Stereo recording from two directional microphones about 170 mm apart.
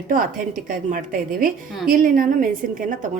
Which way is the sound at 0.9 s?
55° right (ahead or behind).